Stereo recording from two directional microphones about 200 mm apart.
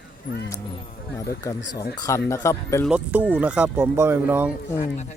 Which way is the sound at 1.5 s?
15° left (ahead or behind).